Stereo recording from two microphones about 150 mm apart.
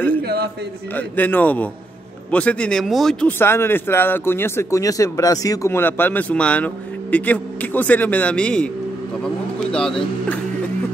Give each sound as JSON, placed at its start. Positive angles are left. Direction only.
{"t": 0.9, "sound": "a man's voice", "side_deg": 10}